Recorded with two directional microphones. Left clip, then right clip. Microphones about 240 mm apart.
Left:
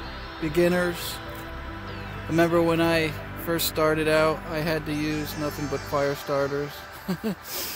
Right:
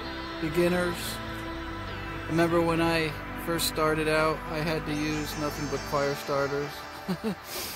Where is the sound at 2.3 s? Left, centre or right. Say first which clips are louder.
Left 4 dB; left.